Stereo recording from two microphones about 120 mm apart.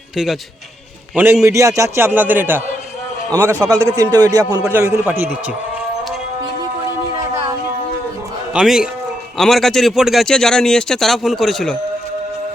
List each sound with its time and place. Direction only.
1.1 s a man's voice: 20° right (ahead or behind)
4.7 s a man's voice: 20° right (ahead or behind)
8.5 s speech: 5° right (ahead or behind)